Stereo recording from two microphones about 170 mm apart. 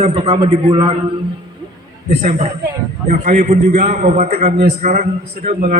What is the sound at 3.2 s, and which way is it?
A man's voice, 45° right (ahead or behind).